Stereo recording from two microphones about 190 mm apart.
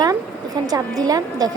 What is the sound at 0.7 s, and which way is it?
Speech, 20° right (ahead or behind).